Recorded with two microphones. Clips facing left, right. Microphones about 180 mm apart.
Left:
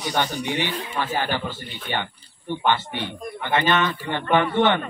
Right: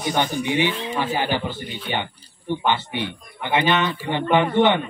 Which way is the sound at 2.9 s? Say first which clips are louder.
Right 1 dB; 15° right (ahead or behind).